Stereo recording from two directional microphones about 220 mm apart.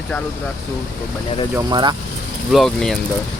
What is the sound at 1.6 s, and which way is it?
Speech, 20° right (ahead or behind).